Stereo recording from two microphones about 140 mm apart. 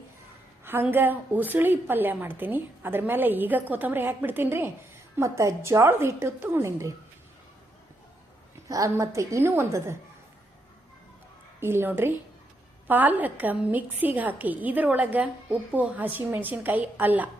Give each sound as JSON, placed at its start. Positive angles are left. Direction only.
{"t": 0.6, "sound": "a woman's voice", "side_deg": -15}
{"t": 8.7, "sound": "a woman's voice", "side_deg": -20}
{"t": 11.6, "sound": "a woman's voice", "side_deg": -15}